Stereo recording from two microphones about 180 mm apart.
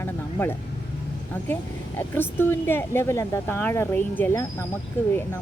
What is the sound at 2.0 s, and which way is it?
Speech, 10° left (ahead or behind).